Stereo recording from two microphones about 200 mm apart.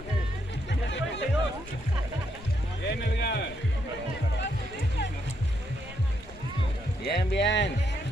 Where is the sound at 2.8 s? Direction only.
60° left (ahead or behind).